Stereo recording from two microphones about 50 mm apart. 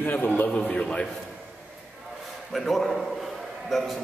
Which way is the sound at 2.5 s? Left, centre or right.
Centre.